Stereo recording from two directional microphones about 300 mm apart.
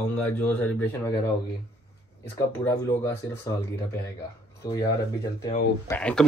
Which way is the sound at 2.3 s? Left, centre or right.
Centre.